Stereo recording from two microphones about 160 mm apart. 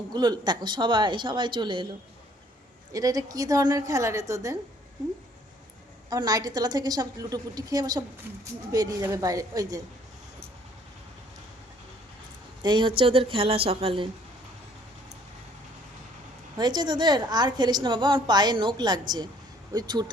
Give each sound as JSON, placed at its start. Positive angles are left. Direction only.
{"t": 0.1, "sound": "a woman's voice", "side_deg": -25}
{"t": 2.9, "sound": "a woman's voice", "side_deg": -20}
{"t": 6.1, "sound": "a woman's voice", "side_deg": -25}
{"t": 12.6, "sound": "a woman's voice", "side_deg": -30}
{"t": 16.6, "sound": "a woman's voice", "side_deg": -25}